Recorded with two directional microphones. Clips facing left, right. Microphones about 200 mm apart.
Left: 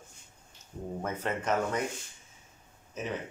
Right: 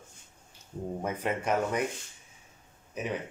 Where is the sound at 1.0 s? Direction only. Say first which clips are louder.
Right 1 dB; 10° right (ahead or behind).